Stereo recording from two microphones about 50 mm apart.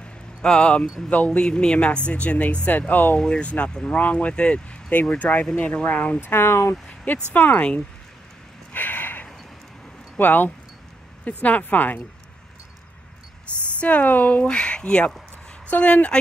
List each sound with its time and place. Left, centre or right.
0.0 s a sound: centre
1.1 s speech: left
1.4 s speech: centre; by 3.2 s left
3.2 s speech: left
6.2 s speech: left
6.7 s speech: left
8.7 s a sound: left
10.1 s speech: left
13.7 s speech: left